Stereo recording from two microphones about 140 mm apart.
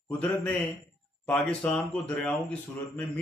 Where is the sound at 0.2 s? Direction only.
10° left (ahead or behind).